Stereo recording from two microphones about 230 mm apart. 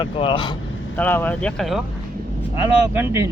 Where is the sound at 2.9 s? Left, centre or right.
Centre.